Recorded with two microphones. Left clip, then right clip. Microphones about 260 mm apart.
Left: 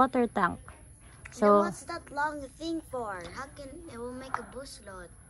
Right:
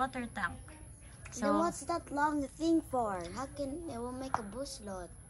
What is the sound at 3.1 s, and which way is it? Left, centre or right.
A woman's voice, right.